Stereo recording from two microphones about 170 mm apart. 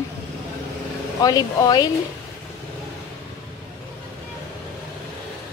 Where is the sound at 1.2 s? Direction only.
20° left (ahead or behind).